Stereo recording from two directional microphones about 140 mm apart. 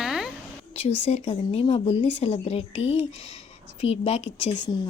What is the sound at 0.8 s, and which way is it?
Speech, 45° left (ahead or behind).